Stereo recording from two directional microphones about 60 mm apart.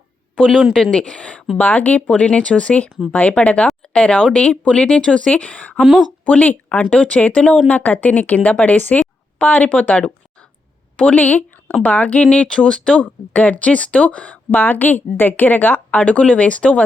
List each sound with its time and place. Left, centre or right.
0.3 s speech: centre